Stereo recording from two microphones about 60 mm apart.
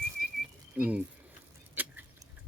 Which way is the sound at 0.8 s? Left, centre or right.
Right.